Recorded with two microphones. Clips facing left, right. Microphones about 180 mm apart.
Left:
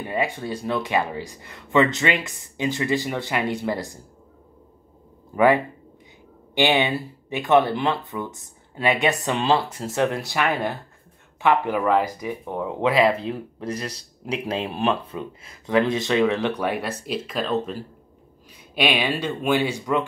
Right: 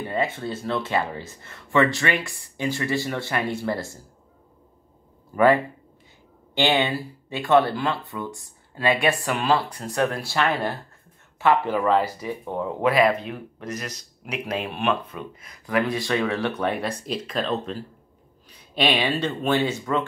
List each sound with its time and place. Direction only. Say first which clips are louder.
0.1 s speech: left 1 dB; 15° left (ahead or behind)
5.3 s speech: even; 15° left (ahead or behind)